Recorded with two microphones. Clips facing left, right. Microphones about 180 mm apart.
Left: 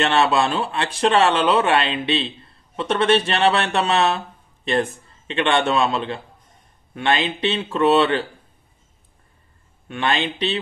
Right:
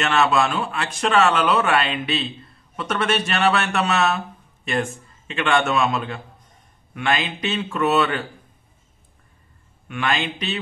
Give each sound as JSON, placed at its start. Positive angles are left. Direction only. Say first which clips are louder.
{"t": 0.0, "sound": "a man's voice", "louder": "left 1 dB", "side_deg": 30}
{"t": 9.8, "sound": "speech", "louder": "left 2 dB", "side_deg": 30}